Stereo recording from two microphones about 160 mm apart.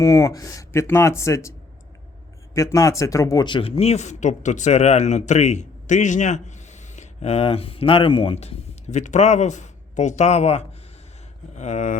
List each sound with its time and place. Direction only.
0.0 s speech: 20° left (ahead or behind)
2.6 s speech: 20° left (ahead or behind); by 11.9 s 50° left (ahead or behind)